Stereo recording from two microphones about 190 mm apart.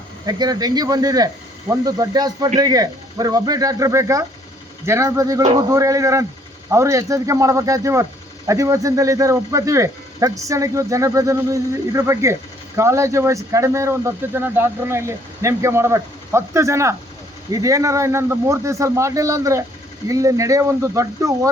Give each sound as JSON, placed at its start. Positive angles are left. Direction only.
{"t": 0.3, "sound": "speech", "side_deg": -20}